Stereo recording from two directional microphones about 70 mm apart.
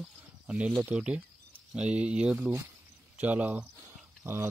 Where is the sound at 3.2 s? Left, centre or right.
Right.